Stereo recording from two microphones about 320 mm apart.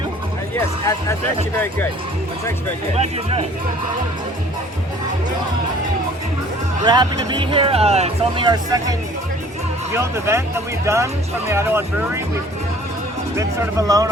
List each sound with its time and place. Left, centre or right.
1.5 s speech: centre
2.9 s speech: centre
6.8 s speech: centre
13.3 s speech: centre